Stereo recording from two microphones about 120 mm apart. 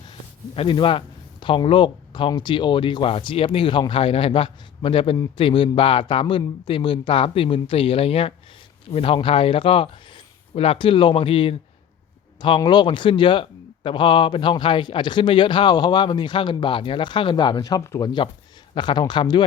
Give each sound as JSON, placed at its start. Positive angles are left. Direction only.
{"t": 0.1, "sound": "speech", "side_deg": 45}